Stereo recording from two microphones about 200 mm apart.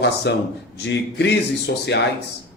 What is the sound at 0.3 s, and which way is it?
A man's voice, 55° left (ahead or behind).